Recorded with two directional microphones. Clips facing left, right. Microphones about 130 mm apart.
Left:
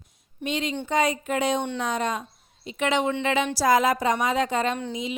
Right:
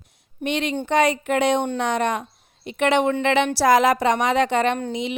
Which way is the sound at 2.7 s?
65° right (ahead or behind).